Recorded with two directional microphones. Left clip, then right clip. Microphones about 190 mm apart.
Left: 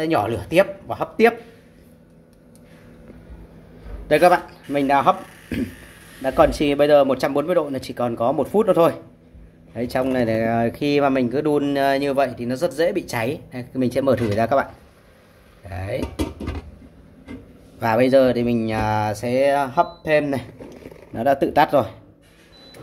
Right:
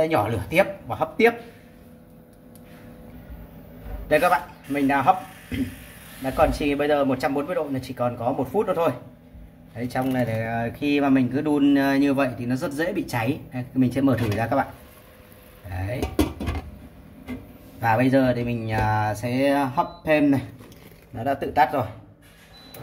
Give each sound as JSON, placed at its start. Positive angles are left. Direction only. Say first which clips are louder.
{"t": 0.1, "sound": "speech", "louder": "left 3 dB", "side_deg": 55}
{"t": 4.1, "sound": "a man's voice", "louder": "left 4 dB", "side_deg": 45}
{"t": 15.7, "sound": "speech", "louder": "left 4 dB", "side_deg": 55}
{"t": 17.7, "sound": "speech", "louder": "left 4 dB", "side_deg": 55}